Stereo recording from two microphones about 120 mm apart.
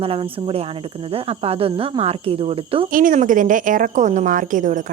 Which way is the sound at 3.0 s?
90° right.